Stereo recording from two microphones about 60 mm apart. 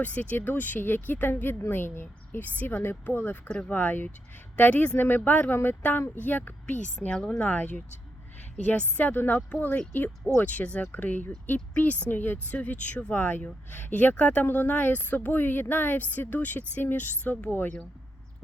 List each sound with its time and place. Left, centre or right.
0.0 s a woman's voice: left
7.1 s a woman's voice: centre; by 17.7 s left